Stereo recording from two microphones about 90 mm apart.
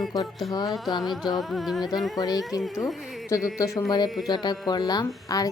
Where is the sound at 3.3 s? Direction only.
40° left (ahead or behind).